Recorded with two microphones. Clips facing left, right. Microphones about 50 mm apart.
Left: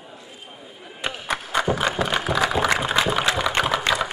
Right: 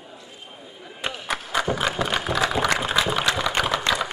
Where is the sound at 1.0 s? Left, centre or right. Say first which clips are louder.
Left 1 dB; centre.